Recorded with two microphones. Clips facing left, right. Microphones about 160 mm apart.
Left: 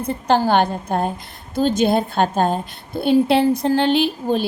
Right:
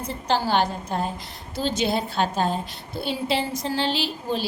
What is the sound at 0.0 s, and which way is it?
A woman's voice, 55° left (ahead or behind).